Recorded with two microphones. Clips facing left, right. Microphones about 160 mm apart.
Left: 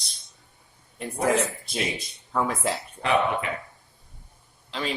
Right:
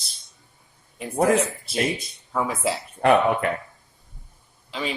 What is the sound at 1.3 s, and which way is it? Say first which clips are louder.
A woman's voice: right 3 dB; centre (ahead or behind).